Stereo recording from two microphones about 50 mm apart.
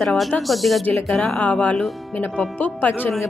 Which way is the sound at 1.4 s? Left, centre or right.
Left.